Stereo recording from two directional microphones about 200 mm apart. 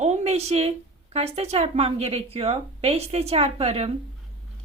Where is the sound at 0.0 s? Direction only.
35° right (ahead or behind).